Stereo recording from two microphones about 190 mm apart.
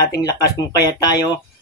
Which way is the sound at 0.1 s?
20° left (ahead or behind).